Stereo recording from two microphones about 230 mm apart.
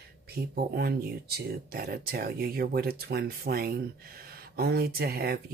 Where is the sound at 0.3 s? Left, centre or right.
Right.